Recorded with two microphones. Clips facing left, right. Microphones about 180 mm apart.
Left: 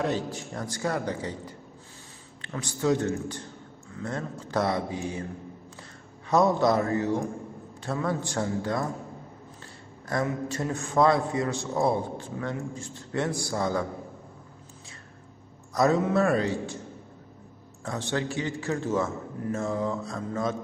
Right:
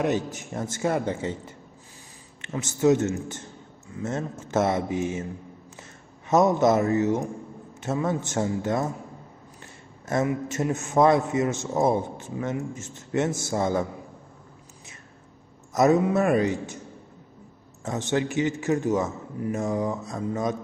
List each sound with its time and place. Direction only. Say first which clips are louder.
0.0 s a man's voice: right 3 dB; 20° right (ahead or behind)
6.2 s a man's voice: right 2 dB; 20° right (ahead or behind)
10.2 s a man's voice: right 4 dB; 20° right (ahead or behind)
15.7 s a man's voice: right 3 dB; 20° right (ahead or behind)
17.8 s a man's voice: right 4 dB; 20° right (ahead or behind)